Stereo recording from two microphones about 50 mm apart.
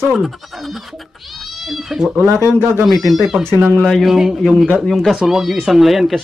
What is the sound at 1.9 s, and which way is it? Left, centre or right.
Speech, centre.